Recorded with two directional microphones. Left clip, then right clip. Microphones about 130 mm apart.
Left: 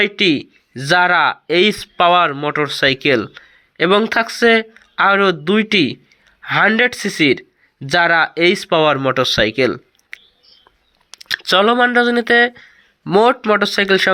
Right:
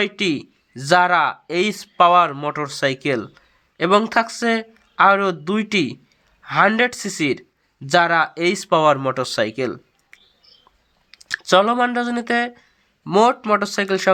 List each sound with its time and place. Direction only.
0.0 s speech: 15° left (ahead or behind)
11.3 s speech: 20° left (ahead or behind)